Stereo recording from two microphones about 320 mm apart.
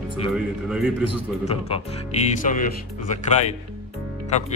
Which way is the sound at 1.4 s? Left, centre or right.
Centre.